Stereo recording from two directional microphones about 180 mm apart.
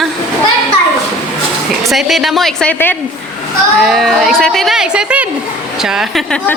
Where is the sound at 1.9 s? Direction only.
Centre (ahead or behind).